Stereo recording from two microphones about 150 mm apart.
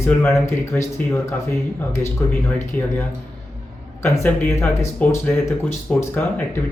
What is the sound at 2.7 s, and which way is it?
Speech, 10° left (ahead or behind).